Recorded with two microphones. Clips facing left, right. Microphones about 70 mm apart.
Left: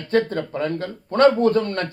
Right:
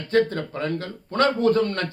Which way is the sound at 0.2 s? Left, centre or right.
Left.